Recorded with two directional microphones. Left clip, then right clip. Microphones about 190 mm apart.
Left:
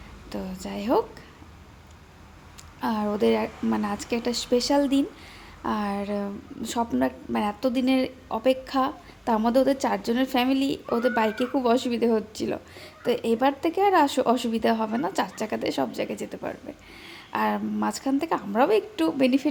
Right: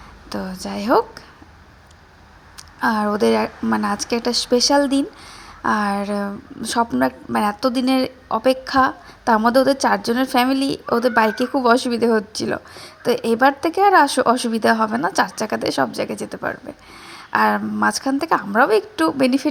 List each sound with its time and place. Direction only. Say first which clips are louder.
0.3 s a woman's voice: right 7 dB; 15° right (ahead or behind)
2.8 s a woman's voice: right 7 dB; 15° right (ahead or behind)